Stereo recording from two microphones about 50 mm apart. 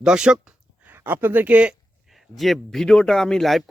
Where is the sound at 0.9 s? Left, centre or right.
Right.